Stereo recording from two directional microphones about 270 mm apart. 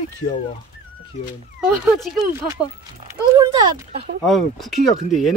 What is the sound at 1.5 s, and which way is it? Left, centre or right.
Speech, centre.